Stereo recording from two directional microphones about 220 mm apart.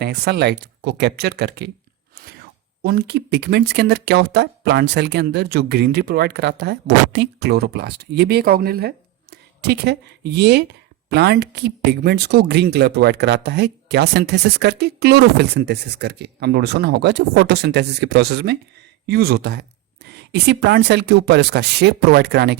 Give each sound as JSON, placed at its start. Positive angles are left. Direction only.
{"t": 0.0, "sound": "speech", "side_deg": -50}
{"t": 2.8, "sound": "speech", "side_deg": -45}